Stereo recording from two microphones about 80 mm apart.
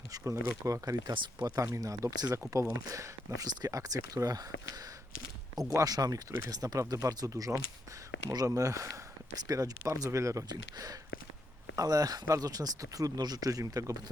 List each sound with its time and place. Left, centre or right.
0.1 s speech: right
1.1 s speech: right
1.6 s speech: right
10.5 s speech: right